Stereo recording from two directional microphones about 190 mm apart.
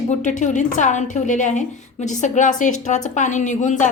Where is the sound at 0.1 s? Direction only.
40° left (ahead or behind).